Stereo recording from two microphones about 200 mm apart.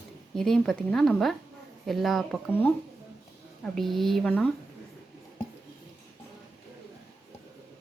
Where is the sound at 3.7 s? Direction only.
Centre (ahead or behind).